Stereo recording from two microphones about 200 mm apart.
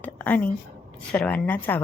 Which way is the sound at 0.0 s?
10° left (ahead or behind).